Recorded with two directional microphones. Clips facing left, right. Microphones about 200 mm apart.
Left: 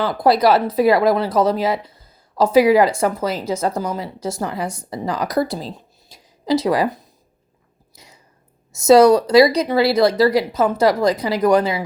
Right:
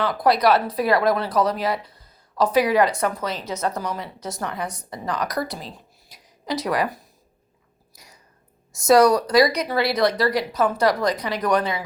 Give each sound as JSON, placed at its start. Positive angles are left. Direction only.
{"t": 0.0, "sound": "speech", "side_deg": 25}
{"t": 7.9, "sound": "whispering", "side_deg": 25}
{"t": 8.7, "sound": "speech", "side_deg": 25}